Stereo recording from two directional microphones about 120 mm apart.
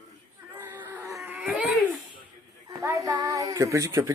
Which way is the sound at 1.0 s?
25° right (ahead or behind).